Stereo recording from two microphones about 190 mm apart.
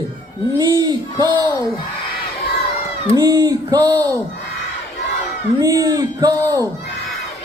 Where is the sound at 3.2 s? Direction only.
20° right (ahead or behind).